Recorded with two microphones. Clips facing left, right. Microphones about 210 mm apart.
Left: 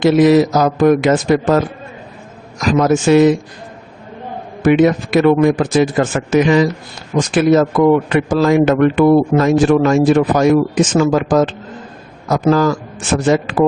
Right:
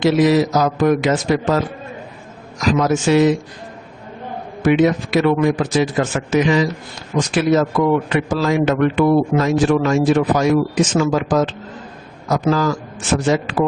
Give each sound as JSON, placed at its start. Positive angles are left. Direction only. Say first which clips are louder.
{"t": 0.0, "sound": "a man's voice", "louder": "left 4 dB", "side_deg": 55}
{"t": 4.6, "sound": "a man's voice", "louder": "left 3 dB", "side_deg": 50}